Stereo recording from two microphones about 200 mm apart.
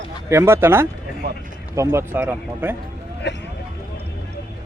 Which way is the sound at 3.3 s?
60° left (ahead or behind).